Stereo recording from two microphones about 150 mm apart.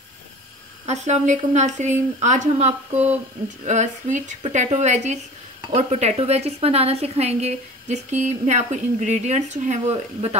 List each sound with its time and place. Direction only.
0.8 s a woman's voice: 50° right (ahead or behind)